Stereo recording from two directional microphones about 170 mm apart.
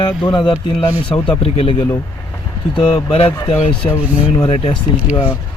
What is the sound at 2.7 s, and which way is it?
Speech, 30° left (ahead or behind).